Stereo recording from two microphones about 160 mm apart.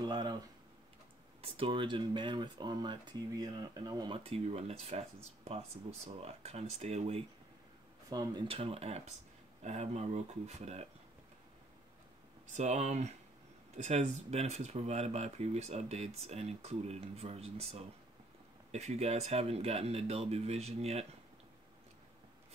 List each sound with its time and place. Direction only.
0.0 s speech: 25° right (ahead or behind)
1.4 s speech: 35° right (ahead or behind)
8.1 s speech: 25° right (ahead or behind); by 10.9 s 40° right (ahead or behind)
12.5 s speech: 45° right (ahead or behind)